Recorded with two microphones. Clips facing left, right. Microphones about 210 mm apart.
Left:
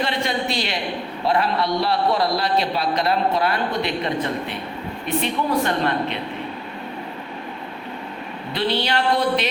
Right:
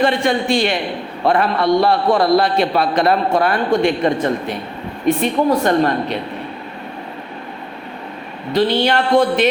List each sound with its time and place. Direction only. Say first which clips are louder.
0.0 s a man's voice: right 7 dB; 50° right (ahead or behind)
8.5 s a man's voice: right 7 dB; 50° right (ahead or behind)